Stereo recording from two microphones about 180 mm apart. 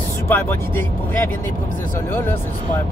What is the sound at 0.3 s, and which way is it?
Speech, 10° left (ahead or behind).